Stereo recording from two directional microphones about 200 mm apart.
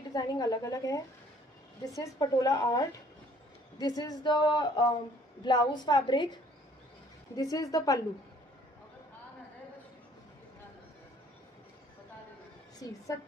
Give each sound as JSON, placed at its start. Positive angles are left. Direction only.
{"t": 0.1, "sound": "speech", "side_deg": 20}
{"t": 12.8, "sound": "speech", "side_deg": 15}